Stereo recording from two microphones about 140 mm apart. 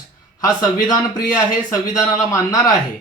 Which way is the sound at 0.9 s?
25° left (ahead or behind).